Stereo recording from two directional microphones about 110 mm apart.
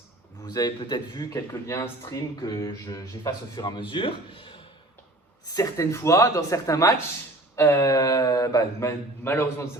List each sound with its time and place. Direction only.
0.4 s speech: 40° left (ahead or behind)
5.5 s speech: 30° left (ahead or behind)